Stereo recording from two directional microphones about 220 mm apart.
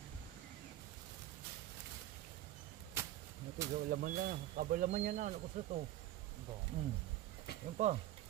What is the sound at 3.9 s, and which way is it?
Speech, 40° right (ahead or behind).